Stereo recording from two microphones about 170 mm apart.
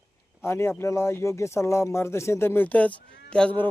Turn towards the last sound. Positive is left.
turn(degrees=5)  # may be behind; listen again after turning